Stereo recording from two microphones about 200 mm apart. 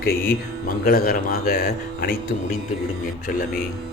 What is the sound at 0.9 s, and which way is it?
Speech, 45° left (ahead or behind).